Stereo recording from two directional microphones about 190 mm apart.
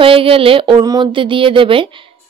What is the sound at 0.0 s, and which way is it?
A woman's voice, 30° right (ahead or behind).